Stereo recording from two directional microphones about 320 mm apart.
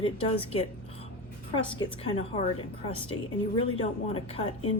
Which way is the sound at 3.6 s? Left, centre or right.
Centre.